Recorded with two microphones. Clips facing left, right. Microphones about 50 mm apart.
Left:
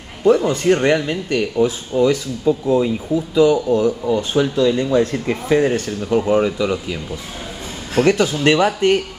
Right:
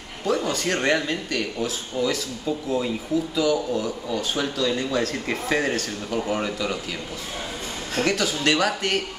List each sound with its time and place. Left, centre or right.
0.2 s speech: left
5.1 s speech: centre
5.5 s speech: centre
5.8 s speech: left